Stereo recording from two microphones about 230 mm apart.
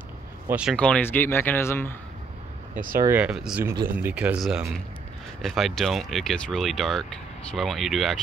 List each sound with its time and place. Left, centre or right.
0.5 s speech: centre
2.7 s speech: right
3.1 s speech: centre